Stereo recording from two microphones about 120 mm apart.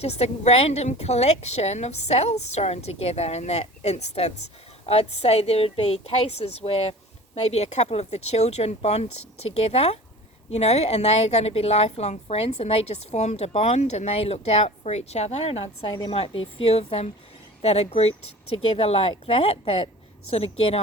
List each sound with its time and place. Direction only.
0.0 s a woman's voice: 60° left (ahead or behind)